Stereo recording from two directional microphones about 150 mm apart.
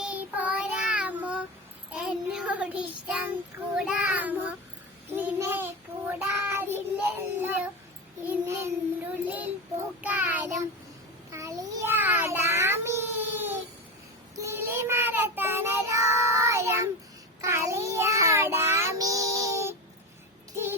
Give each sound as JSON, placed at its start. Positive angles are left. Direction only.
{"t": 0.0, "sound": "child singing", "side_deg": -10}
{"t": 7.4, "sound": "a sound", "side_deg": -10}
{"t": 8.3, "sound": "child singing", "side_deg": -15}